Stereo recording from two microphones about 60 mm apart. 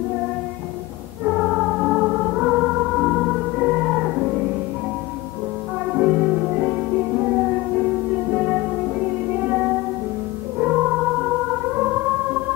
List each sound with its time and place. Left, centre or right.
1.2 s music: centre
5.9 s music: centre
8.3 s music: right